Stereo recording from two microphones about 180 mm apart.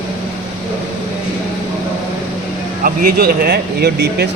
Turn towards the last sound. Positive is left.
turn(degrees=-65)  # may be behind; listen again after turning